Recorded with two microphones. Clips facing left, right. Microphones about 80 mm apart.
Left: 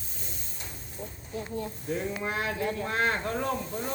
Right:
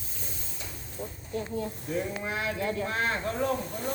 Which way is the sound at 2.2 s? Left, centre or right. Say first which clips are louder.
Left 1 dB; left.